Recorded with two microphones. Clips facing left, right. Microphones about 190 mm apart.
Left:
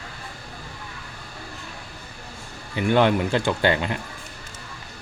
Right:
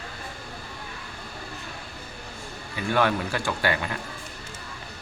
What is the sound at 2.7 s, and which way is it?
Speech, 20° left (ahead or behind).